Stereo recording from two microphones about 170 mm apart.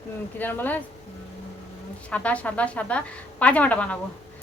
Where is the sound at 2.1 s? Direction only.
10° left (ahead or behind).